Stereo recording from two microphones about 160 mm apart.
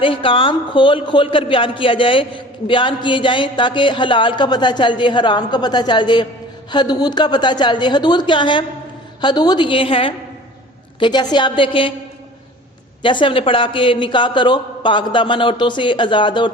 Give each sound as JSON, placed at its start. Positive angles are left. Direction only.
{"t": 0.0, "sound": "a man's voice", "side_deg": 35}
{"t": 13.0, "sound": "a man's voice", "side_deg": 30}